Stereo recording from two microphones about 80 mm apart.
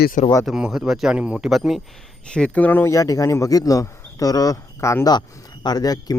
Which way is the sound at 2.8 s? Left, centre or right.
Left.